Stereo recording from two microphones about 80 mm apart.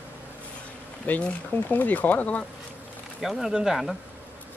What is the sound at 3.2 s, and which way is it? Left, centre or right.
Speech, centre.